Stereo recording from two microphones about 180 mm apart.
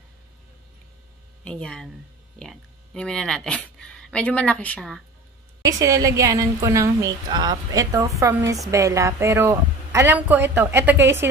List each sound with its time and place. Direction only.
1.4 s speech: 5° left (ahead or behind)
5.6 s a woman's voice: 20° right (ahead or behind)